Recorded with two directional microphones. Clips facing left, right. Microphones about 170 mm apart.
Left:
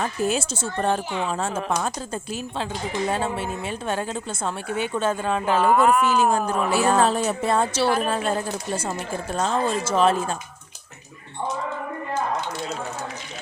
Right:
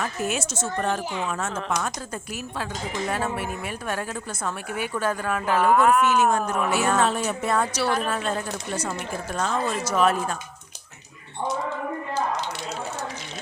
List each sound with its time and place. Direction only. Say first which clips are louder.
0.0 s speech: left 3 dB; 30° left (ahead or behind)
1.5 s a woman's voice: left 2 dB; 10° left (ahead or behind)
1.8 s speech: left 3 dB; 25° left (ahead or behind)
5.6 s speech: even; centre (ahead or behind)
6.1 s speech: left 1 dB; 30° left (ahead or behind)